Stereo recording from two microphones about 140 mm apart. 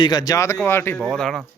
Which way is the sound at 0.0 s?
30° left (ahead or behind).